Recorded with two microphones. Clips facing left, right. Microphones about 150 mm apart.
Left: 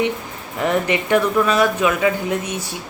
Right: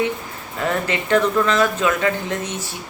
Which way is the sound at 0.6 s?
20° left (ahead or behind).